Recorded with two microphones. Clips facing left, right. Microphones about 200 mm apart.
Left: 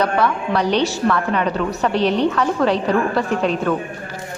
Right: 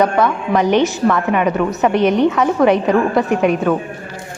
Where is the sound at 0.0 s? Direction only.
20° right (ahead or behind).